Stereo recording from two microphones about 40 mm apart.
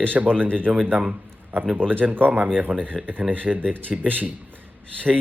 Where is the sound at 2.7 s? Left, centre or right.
Left.